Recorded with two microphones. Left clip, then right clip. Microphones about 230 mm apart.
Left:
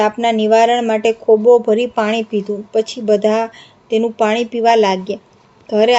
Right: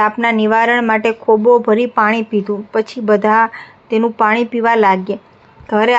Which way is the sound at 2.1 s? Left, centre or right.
Right.